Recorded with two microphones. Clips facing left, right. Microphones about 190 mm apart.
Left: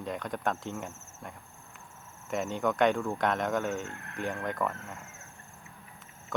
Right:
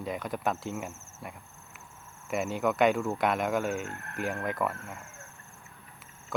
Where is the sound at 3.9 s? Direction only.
45° right (ahead or behind).